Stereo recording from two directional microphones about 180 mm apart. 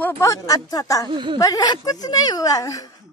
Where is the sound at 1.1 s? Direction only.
30° right (ahead or behind).